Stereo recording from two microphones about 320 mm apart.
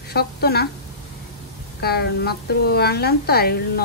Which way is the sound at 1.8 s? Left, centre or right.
Left.